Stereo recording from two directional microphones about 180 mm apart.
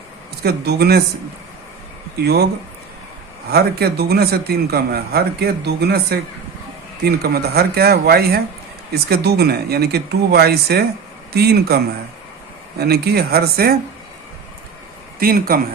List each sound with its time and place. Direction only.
0.4 s a man's voice: 60° right (ahead or behind)
3.5 s a man's voice: 60° right (ahead or behind)
12.8 s a man's voice: 60° right (ahead or behind)
15.2 s a man's voice: 55° right (ahead or behind)